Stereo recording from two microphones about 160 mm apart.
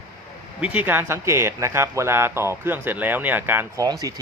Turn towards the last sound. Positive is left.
turn(degrees=-25)  # may be behind; listen again after turning